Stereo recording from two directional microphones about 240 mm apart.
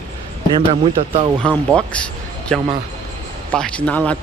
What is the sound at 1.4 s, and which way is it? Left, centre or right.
Speech, centre.